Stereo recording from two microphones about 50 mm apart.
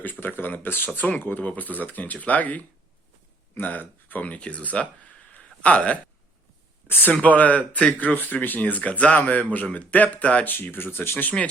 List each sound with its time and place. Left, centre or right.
0.0 s speech: left
5.4 s a sound: left
6.8 s speech: left
7.2 s speech: left
10.4 s speech: left